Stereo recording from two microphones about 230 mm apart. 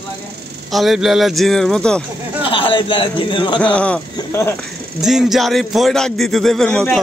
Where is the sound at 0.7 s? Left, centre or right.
Centre.